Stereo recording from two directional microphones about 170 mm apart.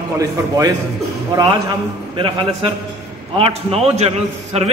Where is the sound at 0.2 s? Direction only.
20° right (ahead or behind).